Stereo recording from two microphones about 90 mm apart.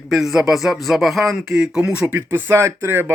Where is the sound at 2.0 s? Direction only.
20° right (ahead or behind).